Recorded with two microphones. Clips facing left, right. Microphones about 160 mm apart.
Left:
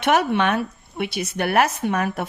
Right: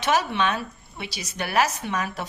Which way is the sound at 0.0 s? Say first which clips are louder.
Left 4 dB; 55° left (ahead or behind).